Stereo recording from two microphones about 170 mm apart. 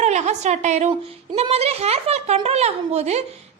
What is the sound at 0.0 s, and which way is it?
A woman's voice, 40° right (ahead or behind).